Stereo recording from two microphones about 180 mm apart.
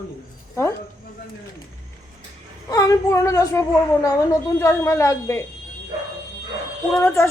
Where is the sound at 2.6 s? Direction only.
20° left (ahead or behind).